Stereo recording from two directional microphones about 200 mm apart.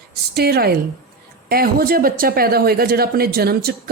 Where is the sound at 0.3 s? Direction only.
50° right (ahead or behind).